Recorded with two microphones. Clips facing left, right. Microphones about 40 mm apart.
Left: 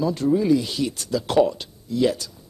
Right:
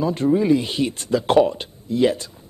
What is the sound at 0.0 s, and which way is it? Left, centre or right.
Speech, right.